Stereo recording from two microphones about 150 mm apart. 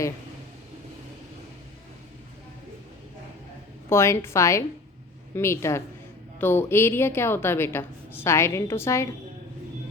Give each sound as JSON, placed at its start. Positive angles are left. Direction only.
{"t": 3.8, "sound": "a woman's voice", "side_deg": 20}